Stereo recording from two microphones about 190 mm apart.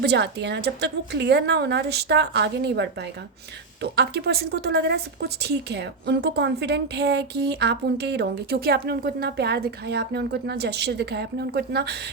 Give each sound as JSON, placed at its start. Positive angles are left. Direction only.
{"t": 0.0, "sound": "a woman's voice", "side_deg": -60}
{"t": 3.9, "sound": "a woman's voice", "side_deg": -60}